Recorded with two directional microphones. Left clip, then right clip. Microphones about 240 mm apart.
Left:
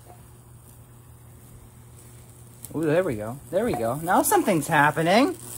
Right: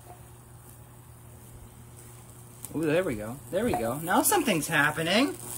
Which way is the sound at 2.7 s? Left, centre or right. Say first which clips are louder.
Left 4 dB; centre.